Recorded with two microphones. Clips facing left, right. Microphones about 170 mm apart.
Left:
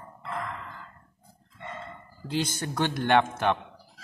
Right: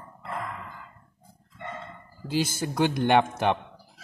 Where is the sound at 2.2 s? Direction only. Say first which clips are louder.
Right 2 dB; 5° right (ahead or behind).